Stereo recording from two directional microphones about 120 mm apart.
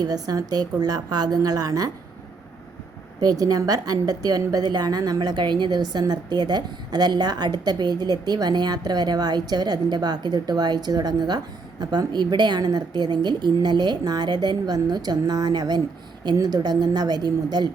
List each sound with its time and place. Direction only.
0.0 s a woman's voice: 30° right (ahead or behind)
3.2 s a woman's voice: 30° right (ahead or behind)